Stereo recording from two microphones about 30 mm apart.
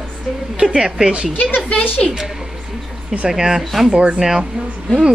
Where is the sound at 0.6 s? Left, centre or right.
Right.